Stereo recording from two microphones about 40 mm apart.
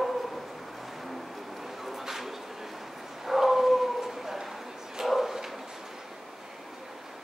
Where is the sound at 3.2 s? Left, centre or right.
Centre.